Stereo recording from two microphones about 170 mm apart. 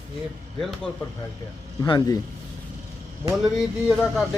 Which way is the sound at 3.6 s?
5° right (ahead or behind).